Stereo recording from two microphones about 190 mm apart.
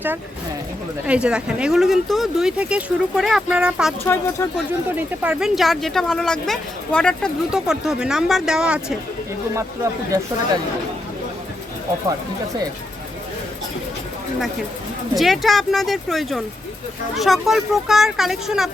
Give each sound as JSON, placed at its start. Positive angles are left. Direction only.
{"t": 1.0, "sound": "speech", "side_deg": -5}
{"t": 4.0, "sound": "speech", "side_deg": 10}
{"t": 4.9, "sound": "speech", "side_deg": -5}
{"t": 9.6, "sound": "speech", "side_deg": -15}
{"t": 15.1, "sound": "speech", "side_deg": 0}